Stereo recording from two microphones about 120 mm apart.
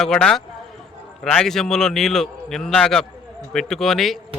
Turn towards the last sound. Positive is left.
turn(degrees=0)  # may be behind; listen again after turning